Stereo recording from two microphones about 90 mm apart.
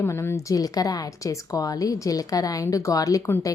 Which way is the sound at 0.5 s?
45° left (ahead or behind).